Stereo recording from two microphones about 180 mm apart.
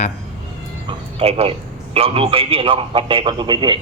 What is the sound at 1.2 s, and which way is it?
A man's voice, 35° right (ahead or behind).